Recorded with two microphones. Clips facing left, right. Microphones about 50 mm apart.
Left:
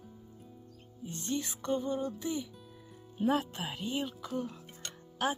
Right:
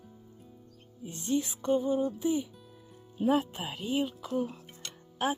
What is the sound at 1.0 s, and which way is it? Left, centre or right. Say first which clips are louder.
Speech: right 5 dB; centre.